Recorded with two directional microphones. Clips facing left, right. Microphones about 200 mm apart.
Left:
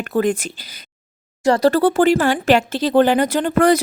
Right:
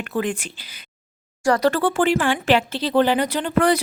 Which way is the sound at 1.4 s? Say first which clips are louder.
Left 4 dB; 30° left (ahead or behind).